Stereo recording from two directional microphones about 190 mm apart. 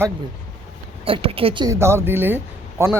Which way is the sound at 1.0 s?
30° right (ahead or behind).